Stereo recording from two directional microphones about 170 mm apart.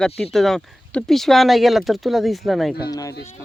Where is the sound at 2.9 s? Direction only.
20° left (ahead or behind).